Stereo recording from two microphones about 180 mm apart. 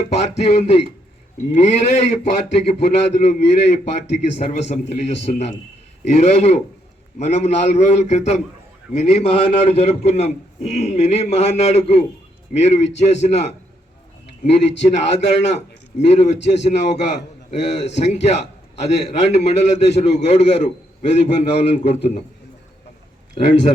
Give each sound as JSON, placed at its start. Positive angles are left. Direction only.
{"t": 0.0, "sound": "a man's voice", "side_deg": 35}
{"t": 23.3, "sound": "a man's voice", "side_deg": 40}